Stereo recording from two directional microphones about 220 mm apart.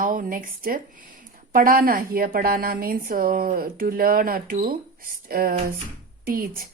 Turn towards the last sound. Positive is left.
turn(degrees=-40)  # may be behind; listen again after turning